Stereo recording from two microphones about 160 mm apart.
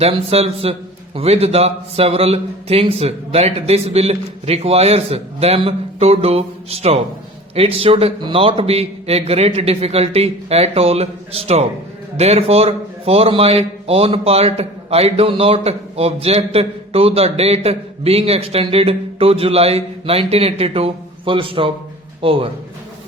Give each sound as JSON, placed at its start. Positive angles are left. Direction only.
{"t": 0.0, "sound": "a man's voice", "side_deg": -40}